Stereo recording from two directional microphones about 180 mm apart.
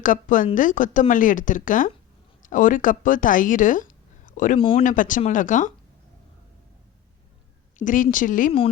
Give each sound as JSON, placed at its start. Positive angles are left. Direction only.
{"t": 0.0, "sound": "speech", "side_deg": 45}
{"t": 7.8, "sound": "speech", "side_deg": 45}